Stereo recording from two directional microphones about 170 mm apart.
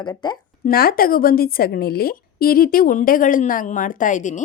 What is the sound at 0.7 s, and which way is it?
A woman's voice, 60° left (ahead or behind).